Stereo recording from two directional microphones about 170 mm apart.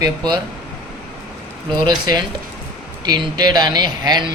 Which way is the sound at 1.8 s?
25° right (ahead or behind).